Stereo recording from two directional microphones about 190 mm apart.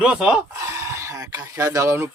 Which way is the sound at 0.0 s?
5° right (ahead or behind).